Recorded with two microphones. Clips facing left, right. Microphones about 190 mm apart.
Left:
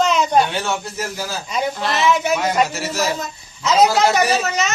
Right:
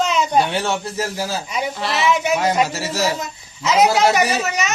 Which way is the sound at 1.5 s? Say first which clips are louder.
Left 5 dB; 5° right (ahead or behind).